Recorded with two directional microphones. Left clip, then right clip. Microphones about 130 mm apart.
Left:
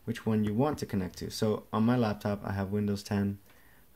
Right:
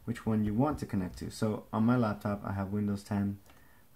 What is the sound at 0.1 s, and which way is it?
Speech, 35° left (ahead or behind).